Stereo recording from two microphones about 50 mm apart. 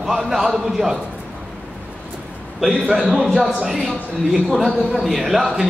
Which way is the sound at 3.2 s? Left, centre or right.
Centre.